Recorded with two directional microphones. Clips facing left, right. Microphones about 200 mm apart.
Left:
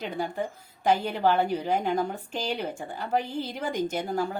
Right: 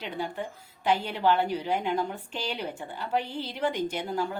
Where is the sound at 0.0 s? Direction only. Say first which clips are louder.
Left 3 dB; 45° left (ahead or behind).